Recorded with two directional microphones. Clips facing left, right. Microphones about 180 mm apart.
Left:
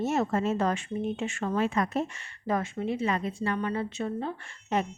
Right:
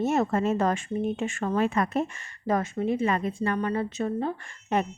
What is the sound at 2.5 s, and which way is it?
Speech, 40° right (ahead or behind).